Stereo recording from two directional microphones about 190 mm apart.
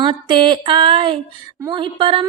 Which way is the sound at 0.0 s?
25° right (ahead or behind).